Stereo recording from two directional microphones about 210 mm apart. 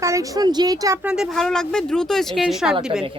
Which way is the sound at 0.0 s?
15° right (ahead or behind).